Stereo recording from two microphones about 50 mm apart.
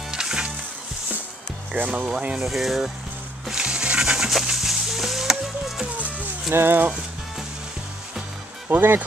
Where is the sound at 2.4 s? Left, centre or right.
Centre.